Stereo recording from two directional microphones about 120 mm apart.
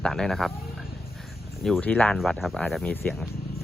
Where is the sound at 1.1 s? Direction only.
Centre (ahead or behind).